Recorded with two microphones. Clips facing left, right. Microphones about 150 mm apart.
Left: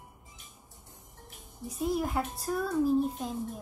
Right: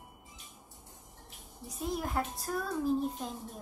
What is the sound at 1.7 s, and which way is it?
Speech, centre (ahead or behind).